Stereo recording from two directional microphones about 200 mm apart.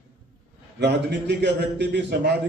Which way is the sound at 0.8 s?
55° right (ahead or behind).